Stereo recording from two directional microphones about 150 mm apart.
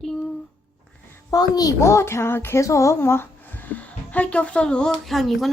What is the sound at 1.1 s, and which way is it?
A woman's voice, 25° left (ahead or behind).